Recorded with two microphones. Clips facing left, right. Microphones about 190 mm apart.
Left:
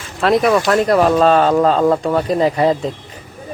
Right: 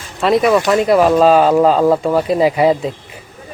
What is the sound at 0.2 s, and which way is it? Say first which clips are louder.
Speech: right 1 dB; centre (ahead or behind).